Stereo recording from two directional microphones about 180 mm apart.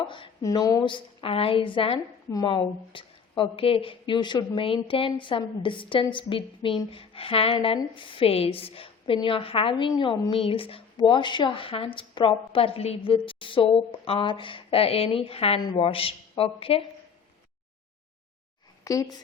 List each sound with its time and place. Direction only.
0.0 s a woman's voice: 25° left (ahead or behind)
18.9 s a woman's voice: 20° left (ahead or behind)